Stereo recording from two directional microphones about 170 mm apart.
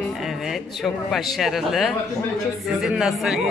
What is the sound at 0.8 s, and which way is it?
Speech, centre (ahead or behind).